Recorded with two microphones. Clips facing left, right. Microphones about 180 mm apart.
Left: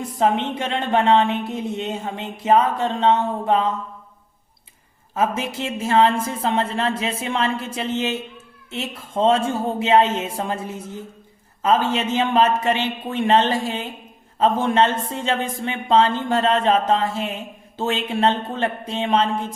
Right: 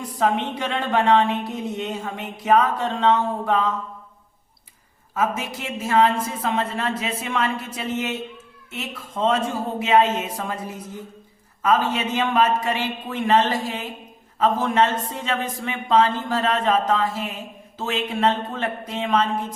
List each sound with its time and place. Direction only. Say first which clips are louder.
0.0 s speech: left 2 dB; 25° left (ahead or behind)
5.1 s speech: left 2 dB; 30° left (ahead or behind)